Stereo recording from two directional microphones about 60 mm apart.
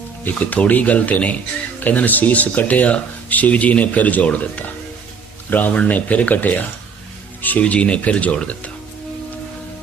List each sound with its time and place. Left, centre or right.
0.3 s speech: left